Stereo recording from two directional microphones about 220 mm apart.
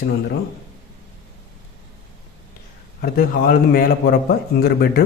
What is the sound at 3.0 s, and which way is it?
A man's voice, 40° left (ahead or behind).